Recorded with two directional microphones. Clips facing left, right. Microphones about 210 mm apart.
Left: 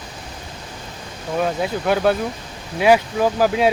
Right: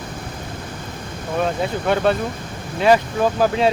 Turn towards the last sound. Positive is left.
turn(degrees=5)  # may be behind; listen again after turning